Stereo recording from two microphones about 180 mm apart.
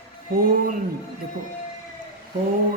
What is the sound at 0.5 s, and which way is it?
Mantra, 50° right (ahead or behind).